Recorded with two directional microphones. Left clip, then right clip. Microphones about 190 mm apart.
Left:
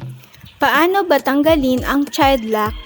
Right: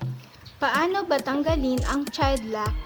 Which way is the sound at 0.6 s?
45° left (ahead or behind).